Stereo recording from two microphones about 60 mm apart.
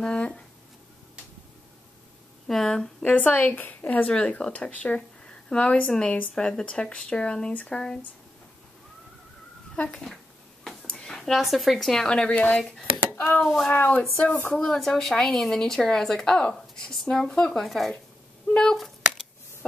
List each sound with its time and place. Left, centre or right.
0.0 s a woman's voice: centre
2.4 s a woman's voice: centre
3.0 s a woman's voice: left; by 8.0 s centre
9.8 s a woman's voice: centre
10.6 s a sound: centre
11.4 s a woman's voice: centre; by 12.7 s left
13.1 s a sound: left
13.7 s a woman's voice: left
14.5 s a woman's voice: centre
18.5 s a sound: centre